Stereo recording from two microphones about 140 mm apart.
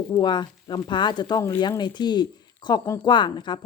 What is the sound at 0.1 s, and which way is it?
Speech, 30° left (ahead or behind).